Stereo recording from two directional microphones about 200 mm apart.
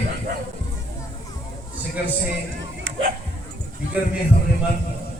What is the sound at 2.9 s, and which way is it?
Bow-wow, 75° right (ahead or behind).